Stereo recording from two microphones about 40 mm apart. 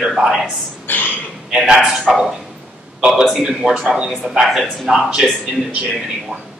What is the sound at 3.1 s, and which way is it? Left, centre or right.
Speech, centre.